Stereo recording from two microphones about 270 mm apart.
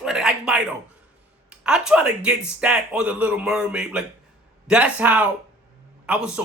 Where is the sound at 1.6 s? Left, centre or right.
Centre.